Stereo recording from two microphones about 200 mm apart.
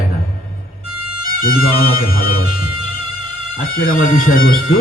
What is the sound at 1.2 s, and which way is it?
Speech, 45° left (ahead or behind).